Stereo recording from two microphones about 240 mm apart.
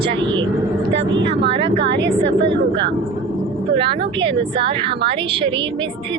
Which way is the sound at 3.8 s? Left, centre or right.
Right.